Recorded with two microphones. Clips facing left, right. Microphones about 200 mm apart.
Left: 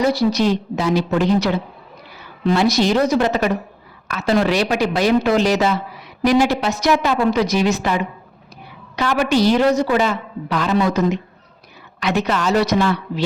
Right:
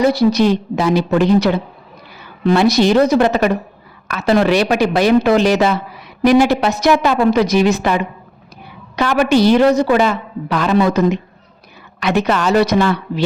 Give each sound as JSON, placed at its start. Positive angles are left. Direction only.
{"t": 0.0, "sound": "a woman's voice", "side_deg": -60}